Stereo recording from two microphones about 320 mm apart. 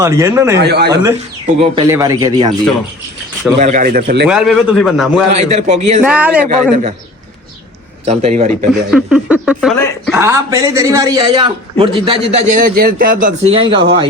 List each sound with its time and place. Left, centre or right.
0.0 s a man's voice: centre
0.6 s speech: right
1.5 s a man's voice: centre
3.6 s a man's voice: right
4.3 s speech: centre
5.3 s a man's voice: right
6.0 s speech: centre
8.0 s a man's voice: centre
8.9 s speech: centre
10.2 s a man's voice: centre